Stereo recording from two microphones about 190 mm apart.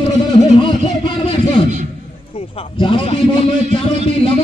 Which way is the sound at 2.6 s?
25° left (ahead or behind).